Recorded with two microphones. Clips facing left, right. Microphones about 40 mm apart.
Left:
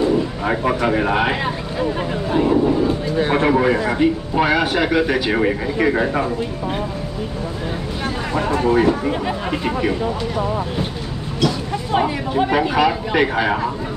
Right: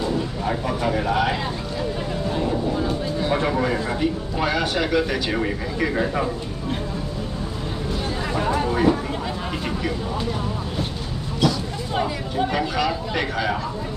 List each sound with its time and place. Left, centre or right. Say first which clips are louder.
0.5 s speech: left 5 dB; left
8.5 s speech: left 5 dB; left
11.4 s speech: left 2 dB; left